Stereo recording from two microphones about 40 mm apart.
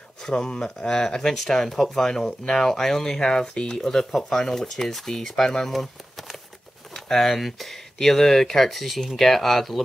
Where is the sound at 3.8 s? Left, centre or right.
Centre.